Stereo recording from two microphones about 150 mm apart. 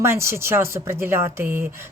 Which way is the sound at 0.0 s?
15° right (ahead or behind).